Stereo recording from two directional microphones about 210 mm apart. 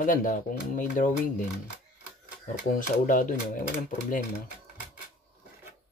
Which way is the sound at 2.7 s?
40° left (ahead or behind).